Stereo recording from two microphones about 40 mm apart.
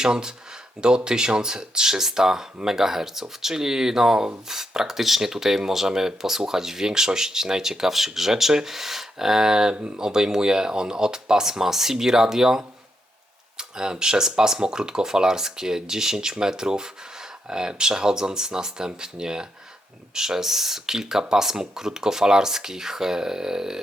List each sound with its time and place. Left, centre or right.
0.0 s speech: centre